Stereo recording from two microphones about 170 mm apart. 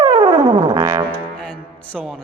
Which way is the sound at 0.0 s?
25° right (ahead or behind).